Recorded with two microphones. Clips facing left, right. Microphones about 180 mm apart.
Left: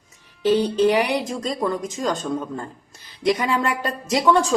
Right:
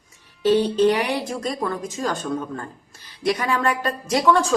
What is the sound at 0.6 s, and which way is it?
Speech, 10° left (ahead or behind).